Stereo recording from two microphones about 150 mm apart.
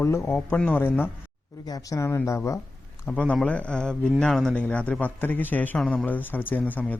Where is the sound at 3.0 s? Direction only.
10° left (ahead or behind).